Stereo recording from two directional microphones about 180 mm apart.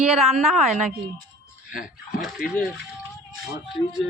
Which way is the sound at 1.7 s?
50° left (ahead or behind).